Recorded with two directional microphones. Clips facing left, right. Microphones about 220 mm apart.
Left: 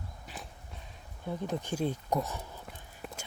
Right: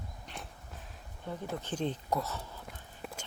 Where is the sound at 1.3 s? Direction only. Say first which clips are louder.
Left 3 dB; 15° left (ahead or behind).